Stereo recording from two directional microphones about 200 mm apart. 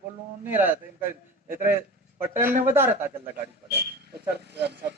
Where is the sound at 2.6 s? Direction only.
10° right (ahead or behind).